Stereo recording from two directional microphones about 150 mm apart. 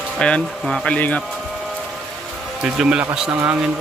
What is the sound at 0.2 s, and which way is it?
Speech, 5° left (ahead or behind).